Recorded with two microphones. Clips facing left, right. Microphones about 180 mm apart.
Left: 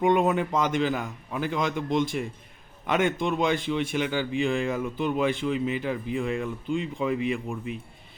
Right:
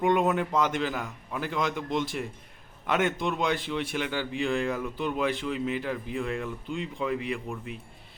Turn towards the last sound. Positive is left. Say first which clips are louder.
# left 4 dB
turn(degrees=5)  # may be behind; listen again after turning